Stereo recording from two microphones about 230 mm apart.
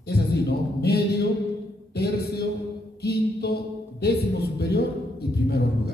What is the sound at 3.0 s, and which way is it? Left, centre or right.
Music, left.